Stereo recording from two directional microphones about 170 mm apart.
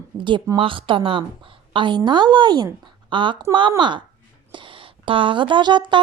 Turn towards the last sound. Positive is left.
turn(degrees=-25)  # may be behind; listen again after turning